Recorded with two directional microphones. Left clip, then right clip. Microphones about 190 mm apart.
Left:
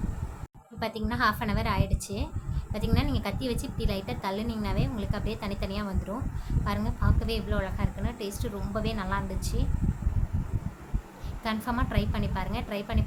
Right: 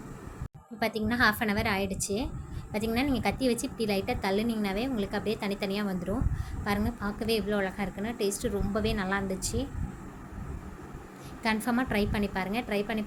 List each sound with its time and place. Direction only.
0.8 s a woman's voice: 15° right (ahead or behind)
11.4 s a woman's voice: 15° right (ahead or behind)